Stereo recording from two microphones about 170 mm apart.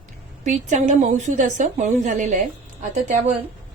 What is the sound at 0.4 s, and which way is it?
A woman's voice, 45° right (ahead or behind).